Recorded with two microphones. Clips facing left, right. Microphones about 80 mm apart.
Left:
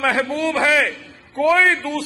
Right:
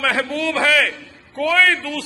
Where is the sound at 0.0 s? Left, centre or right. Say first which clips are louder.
Left 1 dB; left.